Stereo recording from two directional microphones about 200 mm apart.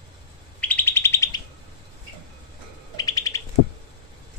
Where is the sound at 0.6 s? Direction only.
10° left (ahead or behind).